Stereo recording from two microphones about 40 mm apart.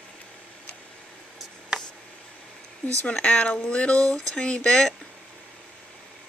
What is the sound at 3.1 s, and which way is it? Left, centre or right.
Speech, left.